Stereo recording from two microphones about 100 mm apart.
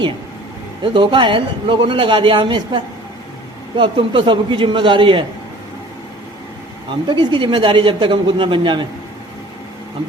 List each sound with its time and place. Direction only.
0.8 s speech: 55° right (ahead or behind)
7.1 s speech: 50° right (ahead or behind)